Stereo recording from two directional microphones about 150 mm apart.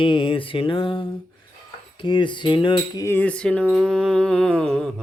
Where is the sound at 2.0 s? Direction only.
30° left (ahead or behind).